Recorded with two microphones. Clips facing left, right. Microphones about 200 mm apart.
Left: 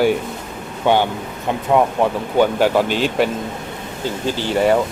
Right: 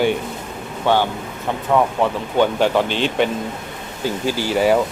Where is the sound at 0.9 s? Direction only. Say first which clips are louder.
Left 2 dB; 15° left (ahead or behind).